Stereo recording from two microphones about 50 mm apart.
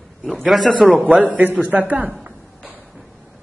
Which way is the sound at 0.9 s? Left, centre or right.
Right.